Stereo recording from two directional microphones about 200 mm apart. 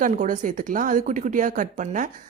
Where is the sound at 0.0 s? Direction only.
40° right (ahead or behind).